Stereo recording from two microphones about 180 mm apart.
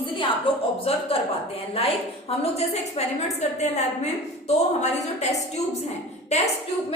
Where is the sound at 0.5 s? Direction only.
30° left (ahead or behind).